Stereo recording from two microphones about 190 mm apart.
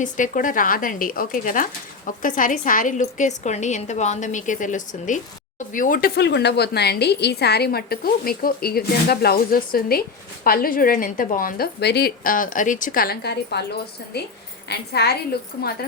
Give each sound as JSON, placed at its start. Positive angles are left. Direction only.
{"t": 0.0, "sound": "a woman's voice", "side_deg": 45}